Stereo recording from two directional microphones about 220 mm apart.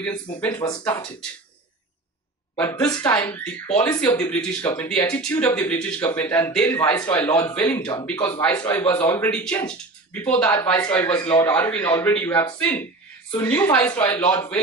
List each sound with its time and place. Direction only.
0.5 s speech: 20° left (ahead or behind)
2.9 s speech: 10° left (ahead or behind)
11.1 s speech: 20° left (ahead or behind)